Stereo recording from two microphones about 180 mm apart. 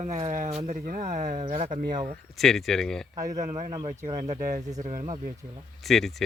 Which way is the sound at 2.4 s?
Centre (ahead or behind).